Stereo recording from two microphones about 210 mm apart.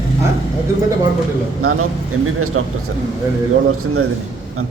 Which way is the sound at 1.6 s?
90° right.